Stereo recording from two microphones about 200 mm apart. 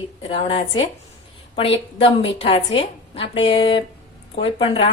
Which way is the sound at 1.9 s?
30° left (ahead or behind).